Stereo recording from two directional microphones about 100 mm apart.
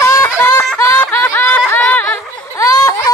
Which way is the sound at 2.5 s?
30° left (ahead or behind).